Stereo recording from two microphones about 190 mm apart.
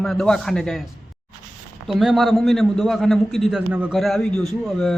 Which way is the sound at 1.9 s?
Centre (ahead or behind).